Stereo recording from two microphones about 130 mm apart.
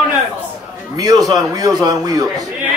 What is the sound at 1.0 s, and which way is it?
A man's voice, 30° right (ahead or behind).